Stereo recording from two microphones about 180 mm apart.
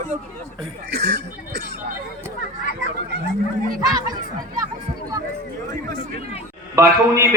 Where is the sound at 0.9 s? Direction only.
65° right (ahead or behind).